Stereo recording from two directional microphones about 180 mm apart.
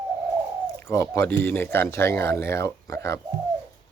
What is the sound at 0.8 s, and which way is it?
Speech, 15° left (ahead or behind).